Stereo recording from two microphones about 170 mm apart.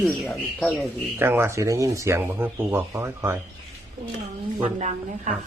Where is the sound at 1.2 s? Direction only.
15° right (ahead or behind).